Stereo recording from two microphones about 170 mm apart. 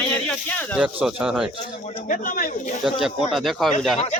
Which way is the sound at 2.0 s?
55° left (ahead or behind).